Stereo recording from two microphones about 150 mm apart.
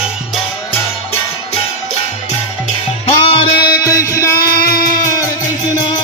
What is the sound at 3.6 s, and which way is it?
Music, 20° left (ahead or behind).